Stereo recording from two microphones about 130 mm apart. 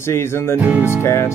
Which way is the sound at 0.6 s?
15° right (ahead or behind).